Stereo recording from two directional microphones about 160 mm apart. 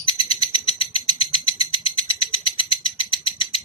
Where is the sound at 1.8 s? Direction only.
35° left (ahead or behind).